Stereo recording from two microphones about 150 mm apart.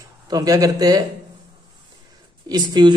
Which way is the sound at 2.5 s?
30° right (ahead or behind).